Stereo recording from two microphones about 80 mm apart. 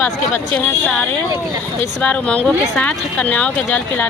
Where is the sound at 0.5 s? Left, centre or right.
Left.